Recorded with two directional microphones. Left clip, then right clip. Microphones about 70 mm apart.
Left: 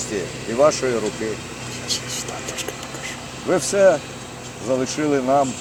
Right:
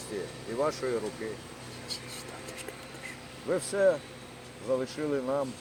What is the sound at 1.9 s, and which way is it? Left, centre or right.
Whispering, right.